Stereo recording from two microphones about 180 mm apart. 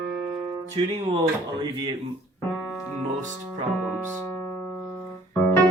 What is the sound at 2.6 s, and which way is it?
Music, centre (ahead or behind).